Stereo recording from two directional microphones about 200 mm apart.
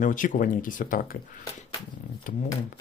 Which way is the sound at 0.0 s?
40° left (ahead or behind).